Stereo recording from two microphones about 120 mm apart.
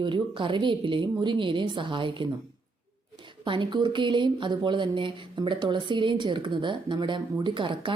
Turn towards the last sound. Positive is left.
turn(degrees=-40)  # may be behind; listen again after turning